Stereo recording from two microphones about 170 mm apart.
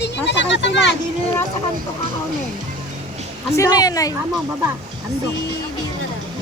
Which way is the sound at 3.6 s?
20° left (ahead or behind).